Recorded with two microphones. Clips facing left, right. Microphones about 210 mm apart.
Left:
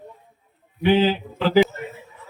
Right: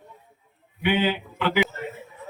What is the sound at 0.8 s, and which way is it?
Speech, 35° left (ahead or behind).